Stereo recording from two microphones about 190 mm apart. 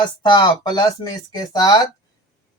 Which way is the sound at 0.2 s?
20° left (ahead or behind).